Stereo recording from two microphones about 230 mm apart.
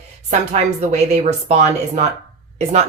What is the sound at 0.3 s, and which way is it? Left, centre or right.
Speech, right.